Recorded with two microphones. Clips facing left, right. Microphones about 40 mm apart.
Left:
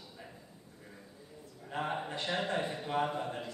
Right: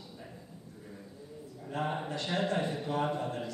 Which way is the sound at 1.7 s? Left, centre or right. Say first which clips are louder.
Right 2 dB; centre.